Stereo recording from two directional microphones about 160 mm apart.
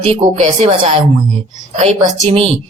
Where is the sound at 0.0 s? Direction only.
40° right (ahead or behind).